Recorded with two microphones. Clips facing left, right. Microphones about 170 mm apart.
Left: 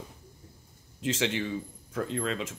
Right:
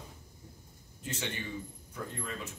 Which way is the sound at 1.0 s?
90° left.